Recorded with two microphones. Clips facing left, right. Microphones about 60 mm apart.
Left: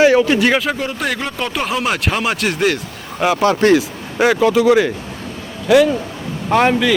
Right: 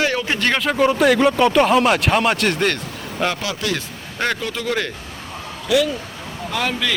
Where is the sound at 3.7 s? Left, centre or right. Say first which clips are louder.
Left 9 dB; centre.